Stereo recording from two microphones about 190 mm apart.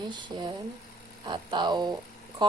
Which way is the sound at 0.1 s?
25° right (ahead or behind).